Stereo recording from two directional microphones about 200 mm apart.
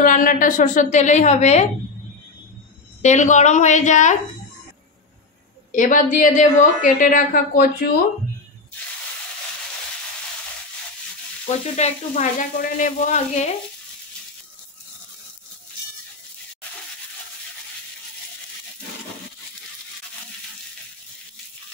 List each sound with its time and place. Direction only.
0.0 s a woman's voice: 45° left (ahead or behind)
3.0 s a woman's voice: 35° left (ahead or behind)
5.7 s a woman's voice: 40° left (ahead or behind)
11.7 s a woman's voice: 35° left (ahead or behind)